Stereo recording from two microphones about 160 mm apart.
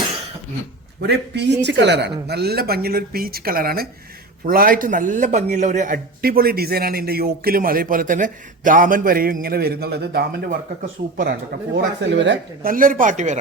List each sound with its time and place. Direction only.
1.0 s a man's voice: 90° right; by 13.4 s 50° right (ahead or behind)